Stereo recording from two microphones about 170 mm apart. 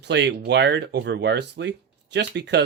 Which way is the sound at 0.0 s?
85° right.